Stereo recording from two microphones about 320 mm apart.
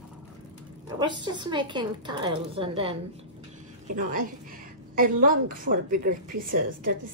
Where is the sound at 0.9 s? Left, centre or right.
Centre.